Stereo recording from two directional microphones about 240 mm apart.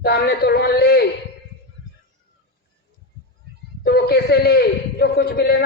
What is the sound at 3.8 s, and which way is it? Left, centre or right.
A man's voice, left.